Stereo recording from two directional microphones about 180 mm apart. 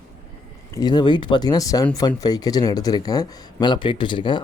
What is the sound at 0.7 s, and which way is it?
Speech, 25° left (ahead or behind).